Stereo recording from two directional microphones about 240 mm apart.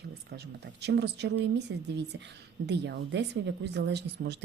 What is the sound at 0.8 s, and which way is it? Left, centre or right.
Speech, right.